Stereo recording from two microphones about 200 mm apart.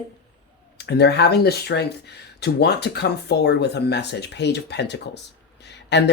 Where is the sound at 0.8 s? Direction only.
55° left (ahead or behind).